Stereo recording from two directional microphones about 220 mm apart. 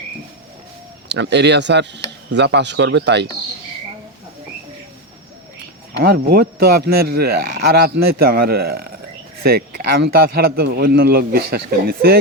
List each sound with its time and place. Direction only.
1.0 s speech: 50° right (ahead or behind)
6.0 s speech: 45° right (ahead or behind)